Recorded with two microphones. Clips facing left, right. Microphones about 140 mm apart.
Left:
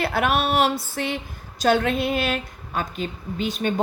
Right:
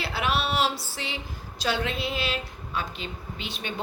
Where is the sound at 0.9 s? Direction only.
55° left (ahead or behind).